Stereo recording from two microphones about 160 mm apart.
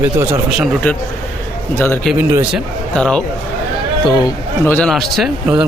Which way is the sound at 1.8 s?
15° left (ahead or behind).